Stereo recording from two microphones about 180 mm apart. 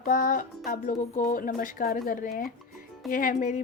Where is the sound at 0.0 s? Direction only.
45° left (ahead or behind).